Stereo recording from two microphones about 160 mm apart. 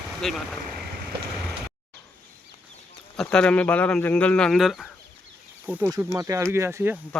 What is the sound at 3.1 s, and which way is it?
Speech, 5° left (ahead or behind).